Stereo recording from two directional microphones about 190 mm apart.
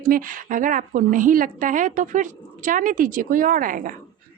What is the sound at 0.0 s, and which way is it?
A woman's voice, 45° right (ahead or behind).